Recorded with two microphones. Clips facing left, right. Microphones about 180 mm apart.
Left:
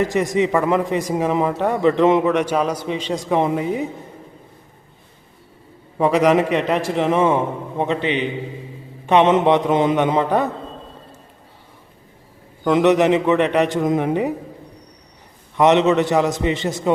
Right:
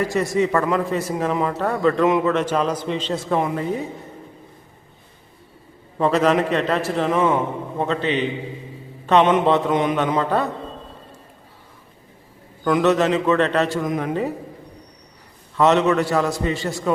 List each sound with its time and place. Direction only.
0.0 s a man's voice: 20° left (ahead or behind)
6.0 s a man's voice: 15° left (ahead or behind)
12.6 s a man's voice: 20° left (ahead or behind)
15.5 s a man's voice: 20° left (ahead or behind)